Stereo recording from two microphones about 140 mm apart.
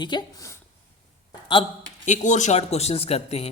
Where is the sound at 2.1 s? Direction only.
60° left (ahead or behind).